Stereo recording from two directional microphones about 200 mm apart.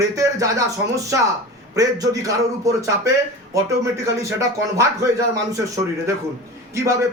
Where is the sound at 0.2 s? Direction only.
15° right (ahead or behind).